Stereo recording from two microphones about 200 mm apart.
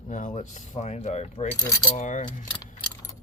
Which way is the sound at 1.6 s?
20° left (ahead or behind).